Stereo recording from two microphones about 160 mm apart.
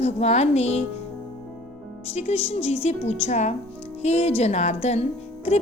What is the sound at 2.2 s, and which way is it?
Speech, 40° left (ahead or behind).